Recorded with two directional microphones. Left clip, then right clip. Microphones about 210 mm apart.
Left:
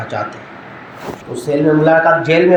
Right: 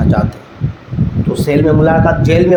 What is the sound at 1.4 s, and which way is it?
A man's voice, 50° right (ahead or behind).